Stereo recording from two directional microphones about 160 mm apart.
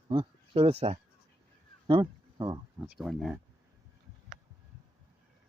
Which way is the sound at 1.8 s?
30° right (ahead or behind).